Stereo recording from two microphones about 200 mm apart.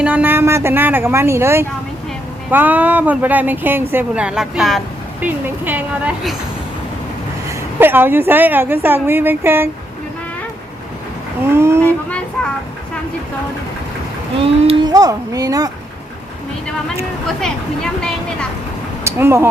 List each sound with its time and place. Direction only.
0.0 s speech: 10° right (ahead or behind)
7.4 s speech: 10° right (ahead or behind)
11.4 s speech: 10° right (ahead or behind)
14.4 s speech: 25° right (ahead or behind)
19.0 s speech: 15° right (ahead or behind)